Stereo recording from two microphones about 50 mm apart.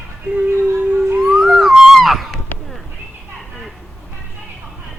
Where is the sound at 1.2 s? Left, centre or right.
Centre.